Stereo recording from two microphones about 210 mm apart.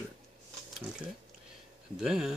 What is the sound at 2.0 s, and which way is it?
Speech, centre (ahead or behind).